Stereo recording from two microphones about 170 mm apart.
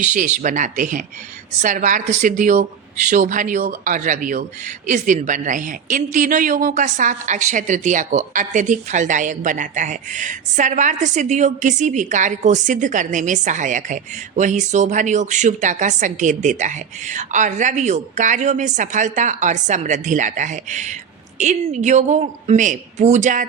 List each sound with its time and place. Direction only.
0.0 s speech: 45° right (ahead or behind)